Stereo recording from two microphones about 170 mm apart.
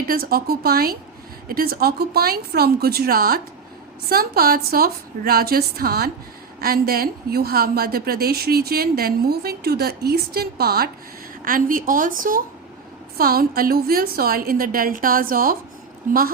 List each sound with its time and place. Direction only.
0.0 s a woman's voice: 60° right (ahead or behind)